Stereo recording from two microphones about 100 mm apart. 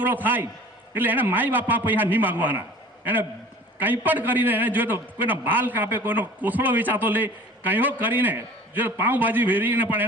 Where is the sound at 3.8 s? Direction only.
20° right (ahead or behind).